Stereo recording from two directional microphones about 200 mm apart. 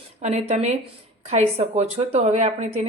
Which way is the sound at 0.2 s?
35° right (ahead or behind).